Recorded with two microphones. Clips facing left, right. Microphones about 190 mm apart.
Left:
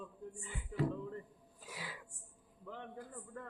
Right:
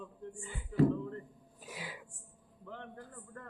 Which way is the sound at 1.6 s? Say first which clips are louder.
Right 3 dB; 20° right (ahead or behind).